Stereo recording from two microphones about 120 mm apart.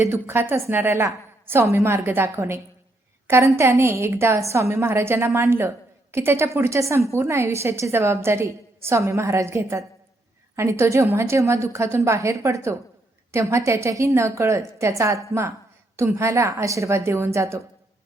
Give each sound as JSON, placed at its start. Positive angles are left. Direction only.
{"t": 0.0, "sound": "a woman's voice", "side_deg": -20}